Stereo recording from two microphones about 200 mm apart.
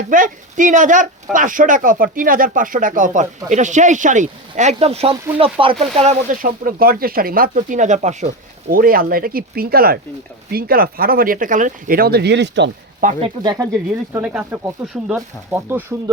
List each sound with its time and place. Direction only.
0.1 s speech: 40° right (ahead or behind); by 12.7 s 60° right (ahead or behind)
13.0 s speech: 40° right (ahead or behind)
13.4 s speech: 20° right (ahead or behind)
14.1 s speech: 10° right (ahead or behind)